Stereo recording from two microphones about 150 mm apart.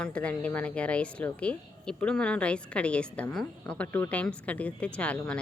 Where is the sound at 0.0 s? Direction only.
10° left (ahead or behind).